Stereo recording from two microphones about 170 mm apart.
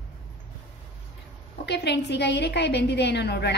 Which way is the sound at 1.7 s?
90° left.